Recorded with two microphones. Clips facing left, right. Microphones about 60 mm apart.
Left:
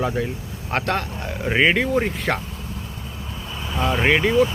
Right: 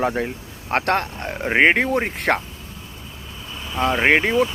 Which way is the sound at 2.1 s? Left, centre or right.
Right.